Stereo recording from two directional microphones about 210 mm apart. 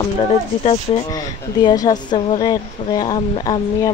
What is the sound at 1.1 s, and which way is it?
Speech, 20° left (ahead or behind).